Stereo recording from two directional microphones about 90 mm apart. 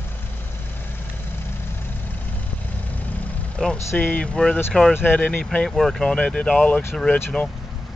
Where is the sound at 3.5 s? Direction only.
10° left (ahead or behind).